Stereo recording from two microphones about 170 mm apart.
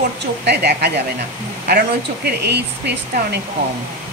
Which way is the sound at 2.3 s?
80° right.